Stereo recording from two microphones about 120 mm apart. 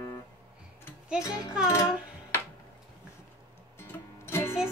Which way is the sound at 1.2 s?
30° left (ahead or behind).